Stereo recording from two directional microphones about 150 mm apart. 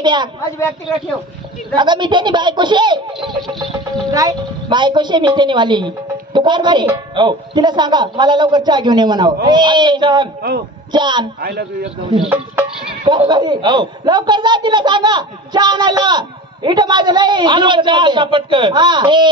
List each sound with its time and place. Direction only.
0.0 s speech: 30° right (ahead or behind)
1.8 s speech: 30° right (ahead or behind)
4.1 s a woman's voice: 25° right (ahead or behind)
11.4 s a man's voice: 90° right
12.0 s speech: 35° right (ahead or behind)